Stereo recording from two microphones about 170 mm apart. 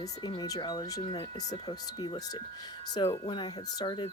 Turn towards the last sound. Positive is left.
turn(degrees=25)  # may be behind; listen again after turning